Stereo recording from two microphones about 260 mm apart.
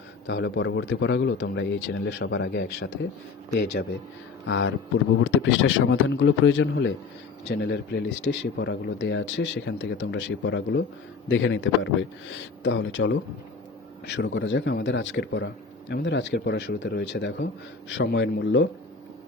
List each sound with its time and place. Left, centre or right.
0.3 s speech: left